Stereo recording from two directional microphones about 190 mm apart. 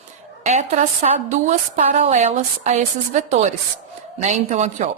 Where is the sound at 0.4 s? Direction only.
35° right (ahead or behind).